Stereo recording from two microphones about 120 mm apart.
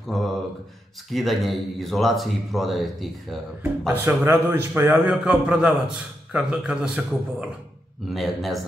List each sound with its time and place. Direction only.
0.0 s a sound: centre (ahead or behind)
1.1 s speech: centre (ahead or behind)
3.8 s speech: 20° right (ahead or behind)
5.1 s a man's voice: 5° right (ahead or behind)